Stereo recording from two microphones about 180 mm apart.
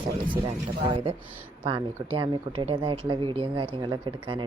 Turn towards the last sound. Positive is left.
turn(degrees=-25)  # may be behind; listen again after turning